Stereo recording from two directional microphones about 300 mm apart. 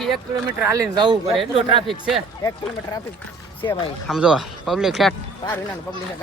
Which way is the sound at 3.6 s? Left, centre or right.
Centre.